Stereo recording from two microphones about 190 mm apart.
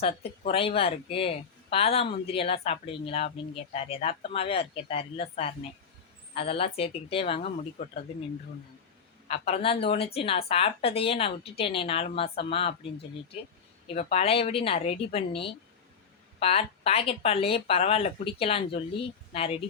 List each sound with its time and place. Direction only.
0.0 s a woman's voice: 30° left (ahead or behind)
9.2 s speech: 35° left (ahead or behind)
13.8 s speech: 30° left (ahead or behind)